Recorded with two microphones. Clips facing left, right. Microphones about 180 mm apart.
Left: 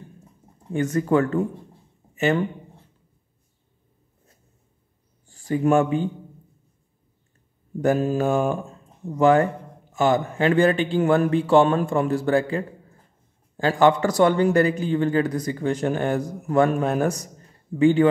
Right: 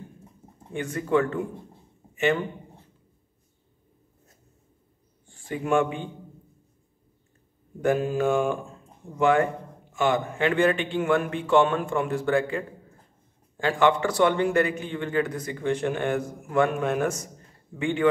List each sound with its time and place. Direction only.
0.7 s a man's voice: 40° left (ahead or behind)
5.3 s speech: 40° left (ahead or behind)
7.8 s a man's voice: 40° left (ahead or behind)